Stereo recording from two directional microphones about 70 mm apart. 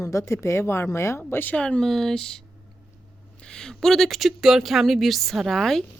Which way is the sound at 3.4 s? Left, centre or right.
Centre.